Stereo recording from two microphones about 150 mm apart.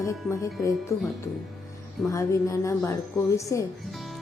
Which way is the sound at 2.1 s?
20° left (ahead or behind).